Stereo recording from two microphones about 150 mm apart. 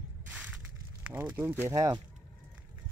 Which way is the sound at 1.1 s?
15° right (ahead or behind).